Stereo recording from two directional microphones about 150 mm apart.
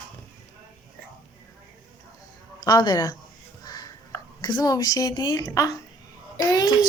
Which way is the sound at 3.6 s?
25° left (ahead or behind).